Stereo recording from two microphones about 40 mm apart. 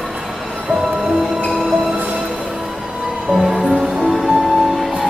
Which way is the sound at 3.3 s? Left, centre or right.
Centre.